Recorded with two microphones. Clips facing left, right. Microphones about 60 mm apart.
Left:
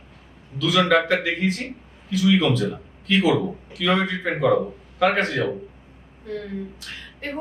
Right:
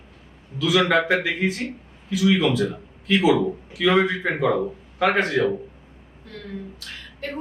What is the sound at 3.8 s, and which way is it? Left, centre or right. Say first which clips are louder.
A man's voice: right 3 dB; centre.